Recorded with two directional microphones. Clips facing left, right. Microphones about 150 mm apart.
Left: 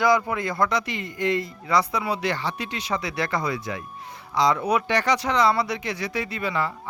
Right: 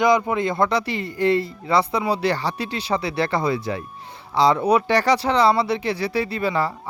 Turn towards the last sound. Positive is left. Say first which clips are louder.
# right 4 dB
turn(degrees=-35)  # may be behind; listen again after turning